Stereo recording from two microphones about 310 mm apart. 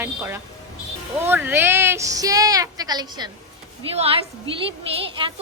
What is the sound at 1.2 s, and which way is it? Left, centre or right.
A woman's voice, centre.